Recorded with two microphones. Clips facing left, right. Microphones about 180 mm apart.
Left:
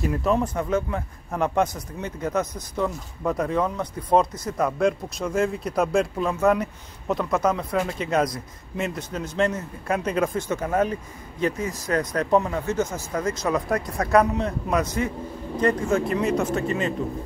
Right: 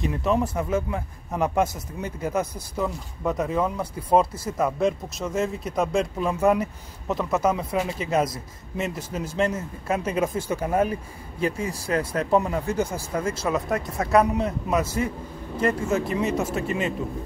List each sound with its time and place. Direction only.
0.0 s a man's voice: 5° right (ahead or behind)
11.6 s speech: 30° right (ahead or behind)
12.3 s a man's voice: 15° right (ahead or behind)